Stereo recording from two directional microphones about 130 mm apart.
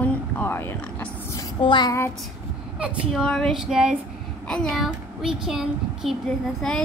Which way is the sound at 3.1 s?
5° left (ahead or behind).